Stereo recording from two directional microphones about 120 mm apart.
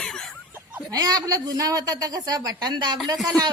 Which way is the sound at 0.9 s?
30° right (ahead or behind).